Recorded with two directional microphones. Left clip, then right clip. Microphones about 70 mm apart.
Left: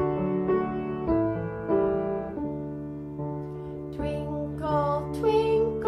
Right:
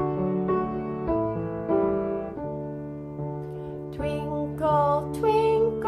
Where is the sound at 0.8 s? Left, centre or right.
Centre.